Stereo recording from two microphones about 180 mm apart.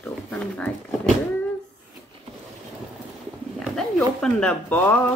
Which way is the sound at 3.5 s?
Centre (ahead or behind).